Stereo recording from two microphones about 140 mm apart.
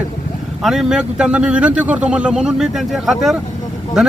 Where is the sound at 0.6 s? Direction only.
Centre (ahead or behind).